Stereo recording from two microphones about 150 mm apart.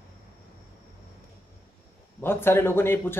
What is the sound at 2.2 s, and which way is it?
Speech, 15° left (ahead or behind).